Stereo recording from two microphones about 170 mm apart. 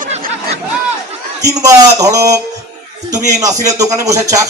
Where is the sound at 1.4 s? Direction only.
20° right (ahead or behind).